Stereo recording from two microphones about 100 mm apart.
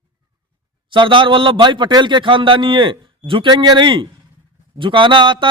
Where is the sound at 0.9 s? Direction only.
55° right (ahead or behind).